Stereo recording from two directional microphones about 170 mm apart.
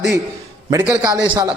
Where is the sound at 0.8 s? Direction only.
10° right (ahead or behind).